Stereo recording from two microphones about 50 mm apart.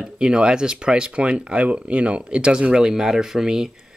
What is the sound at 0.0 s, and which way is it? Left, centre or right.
Speech, centre.